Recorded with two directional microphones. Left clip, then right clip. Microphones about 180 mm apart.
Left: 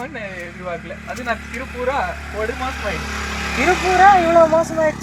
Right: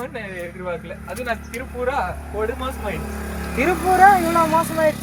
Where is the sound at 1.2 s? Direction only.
30° right (ahead or behind); by 4.6 s 70° right (ahead or behind).